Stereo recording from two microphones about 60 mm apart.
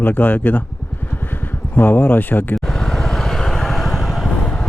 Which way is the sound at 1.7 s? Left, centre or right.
Left.